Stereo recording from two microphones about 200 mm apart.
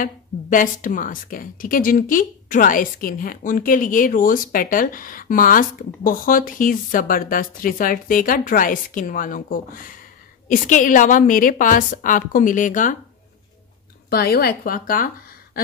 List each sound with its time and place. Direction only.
0.0 s a woman's voice: 40° left (ahead or behind)
14.1 s a woman's voice: 50° left (ahead or behind)